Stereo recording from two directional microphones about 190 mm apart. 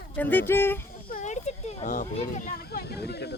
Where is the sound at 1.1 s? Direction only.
40° left (ahead or behind).